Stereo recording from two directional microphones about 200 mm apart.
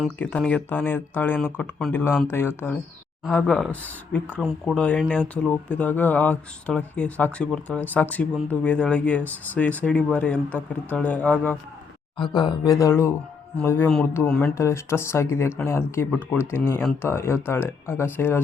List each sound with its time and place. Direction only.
0.0 s speech: 10° left (ahead or behind)
12.1 s speech: 25° left (ahead or behind)